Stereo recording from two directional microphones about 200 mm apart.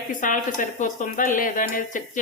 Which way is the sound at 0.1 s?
40° left (ahead or behind).